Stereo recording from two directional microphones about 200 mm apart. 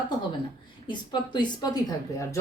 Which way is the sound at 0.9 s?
20° left (ahead or behind).